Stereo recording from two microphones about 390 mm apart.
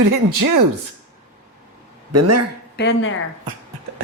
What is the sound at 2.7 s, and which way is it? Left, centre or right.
Speech, left.